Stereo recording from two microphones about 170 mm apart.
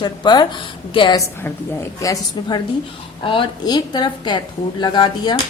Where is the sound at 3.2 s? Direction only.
30° left (ahead or behind).